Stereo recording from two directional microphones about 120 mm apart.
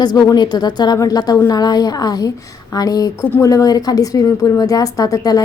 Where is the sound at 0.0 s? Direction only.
35° left (ahead or behind).